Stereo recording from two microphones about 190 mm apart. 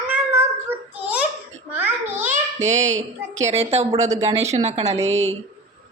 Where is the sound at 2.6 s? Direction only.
35° right (ahead or behind).